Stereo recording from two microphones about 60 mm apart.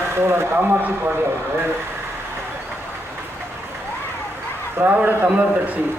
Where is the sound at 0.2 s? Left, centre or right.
Right.